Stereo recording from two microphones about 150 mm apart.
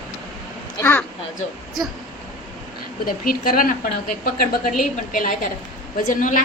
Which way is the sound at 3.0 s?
70° left (ahead or behind).